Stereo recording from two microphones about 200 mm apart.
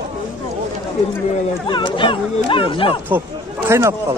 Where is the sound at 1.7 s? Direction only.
25° left (ahead or behind).